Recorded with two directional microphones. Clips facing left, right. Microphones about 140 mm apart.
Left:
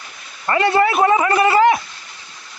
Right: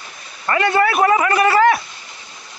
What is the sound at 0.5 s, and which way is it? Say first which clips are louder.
A man's voice: left 1 dB; 25° left (ahead or behind).